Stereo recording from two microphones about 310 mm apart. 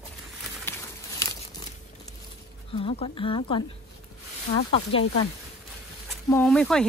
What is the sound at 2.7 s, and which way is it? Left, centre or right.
Speech, centre.